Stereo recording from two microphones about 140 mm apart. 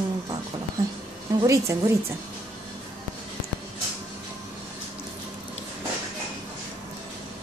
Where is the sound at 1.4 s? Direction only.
20° right (ahead or behind).